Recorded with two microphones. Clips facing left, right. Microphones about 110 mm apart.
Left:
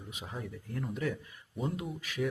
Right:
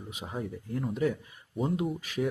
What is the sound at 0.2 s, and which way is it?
Speech, 25° right (ahead or behind).